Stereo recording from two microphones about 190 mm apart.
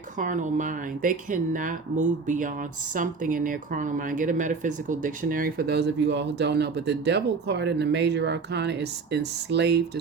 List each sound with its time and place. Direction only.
0.2 s speech: 40° right (ahead or behind); by 10.0 s 60° right (ahead or behind)